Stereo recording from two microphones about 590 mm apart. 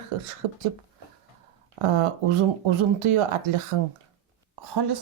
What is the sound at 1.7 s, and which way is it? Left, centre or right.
Speech, right.